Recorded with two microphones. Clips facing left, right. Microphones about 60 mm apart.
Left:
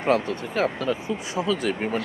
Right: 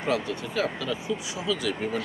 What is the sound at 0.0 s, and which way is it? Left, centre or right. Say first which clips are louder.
Speech: left 5 dB; left.